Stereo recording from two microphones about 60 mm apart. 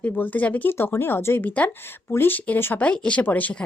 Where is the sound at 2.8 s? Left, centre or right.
Centre.